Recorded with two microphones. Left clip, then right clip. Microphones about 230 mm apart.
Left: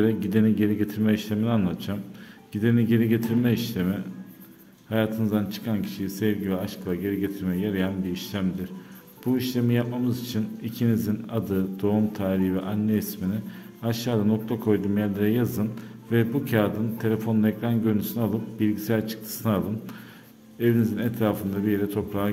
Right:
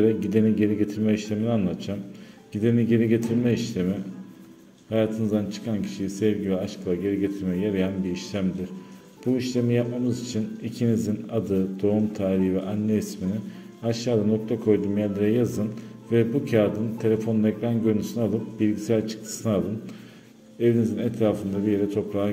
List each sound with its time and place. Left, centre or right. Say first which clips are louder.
0.0 s a man's voice: right 2 dB; centre